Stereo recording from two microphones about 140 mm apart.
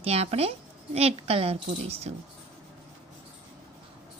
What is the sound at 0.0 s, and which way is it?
A woman's voice, 45° right (ahead or behind).